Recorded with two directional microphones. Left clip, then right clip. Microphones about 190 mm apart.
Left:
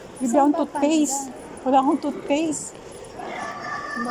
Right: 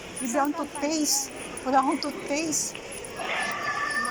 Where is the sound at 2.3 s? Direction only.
40° left (ahead or behind).